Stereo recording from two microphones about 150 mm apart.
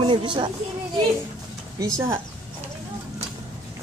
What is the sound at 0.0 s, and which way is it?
Speech, 35° right (ahead or behind).